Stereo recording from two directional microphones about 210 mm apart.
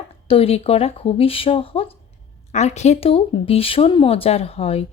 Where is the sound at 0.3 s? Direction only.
25° left (ahead or behind).